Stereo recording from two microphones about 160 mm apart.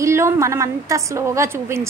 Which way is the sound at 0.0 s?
20° right (ahead or behind).